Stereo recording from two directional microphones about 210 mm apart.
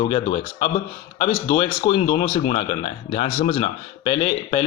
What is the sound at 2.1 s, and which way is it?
Speech, 40° left (ahead or behind).